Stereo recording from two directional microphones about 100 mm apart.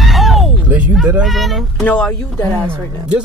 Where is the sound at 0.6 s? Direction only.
15° right (ahead or behind).